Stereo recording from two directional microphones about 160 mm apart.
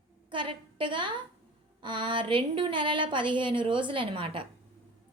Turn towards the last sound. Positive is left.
turn(degrees=-30)  # may be behind; listen again after turning